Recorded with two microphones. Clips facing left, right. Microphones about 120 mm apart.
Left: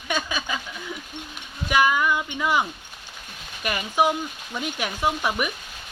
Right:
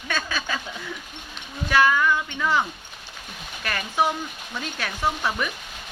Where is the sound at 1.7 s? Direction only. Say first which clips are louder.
Right 1 dB; 15° left (ahead or behind).